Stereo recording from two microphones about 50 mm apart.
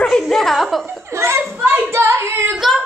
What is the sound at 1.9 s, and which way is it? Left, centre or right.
Singing, right.